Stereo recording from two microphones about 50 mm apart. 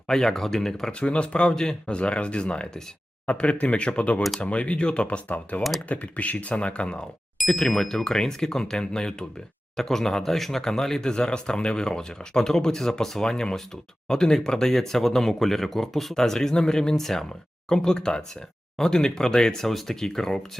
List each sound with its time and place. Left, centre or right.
0.1 s speech: centre
0.9 s speech: left
7.3 s speech: centre